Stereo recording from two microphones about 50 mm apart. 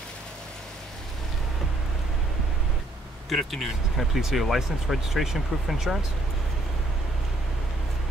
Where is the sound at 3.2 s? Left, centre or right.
Centre.